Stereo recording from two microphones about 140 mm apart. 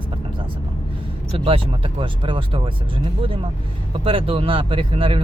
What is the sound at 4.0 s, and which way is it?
Speech, 40° right (ahead or behind).